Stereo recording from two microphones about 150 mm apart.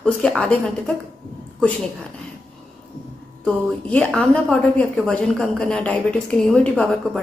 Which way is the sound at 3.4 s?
10° left (ahead or behind).